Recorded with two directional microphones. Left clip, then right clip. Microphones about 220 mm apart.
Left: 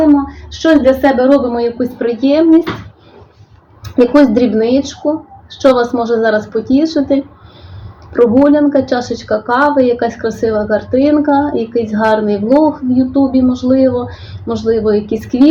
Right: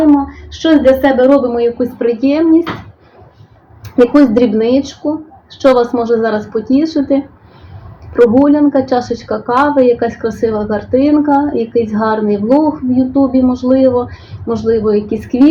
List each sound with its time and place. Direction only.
0.0 s a woman's voice: 5° right (ahead or behind)
3.8 s a woman's voice: centre (ahead or behind)